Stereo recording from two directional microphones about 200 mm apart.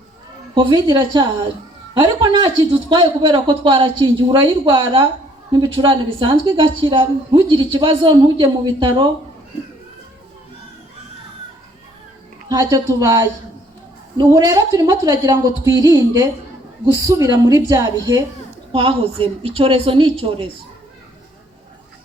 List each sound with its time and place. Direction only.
0.9 s a woman's voice: 25° right (ahead or behind)
12.5 s a woman's voice: 20° right (ahead or behind)
18.7 s a woman's voice: 25° right (ahead or behind)